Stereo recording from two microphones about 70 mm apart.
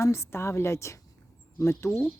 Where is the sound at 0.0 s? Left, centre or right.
Left.